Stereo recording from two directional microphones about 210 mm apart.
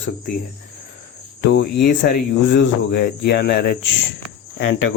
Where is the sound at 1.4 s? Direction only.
55° left (ahead or behind).